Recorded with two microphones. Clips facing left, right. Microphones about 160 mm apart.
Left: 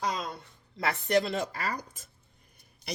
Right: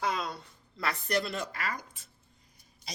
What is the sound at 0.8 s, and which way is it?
Speech, 25° left (ahead or behind).